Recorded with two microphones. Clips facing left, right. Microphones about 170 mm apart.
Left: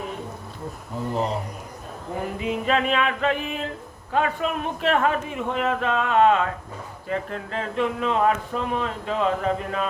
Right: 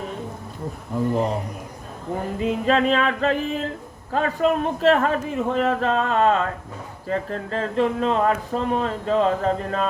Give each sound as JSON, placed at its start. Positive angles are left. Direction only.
{"t": 2.4, "sound": "speech", "side_deg": -35}